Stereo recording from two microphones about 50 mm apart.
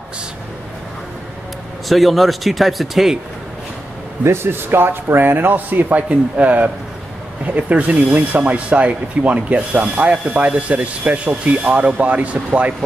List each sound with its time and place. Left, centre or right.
1.9 s speech: centre
4.2 s speech: right